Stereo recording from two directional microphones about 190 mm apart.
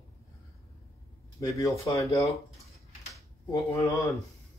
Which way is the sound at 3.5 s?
15° left (ahead or behind).